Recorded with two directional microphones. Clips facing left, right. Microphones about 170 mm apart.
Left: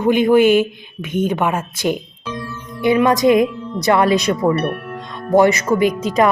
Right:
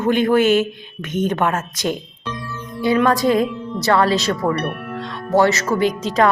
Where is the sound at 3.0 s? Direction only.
20° left (ahead or behind).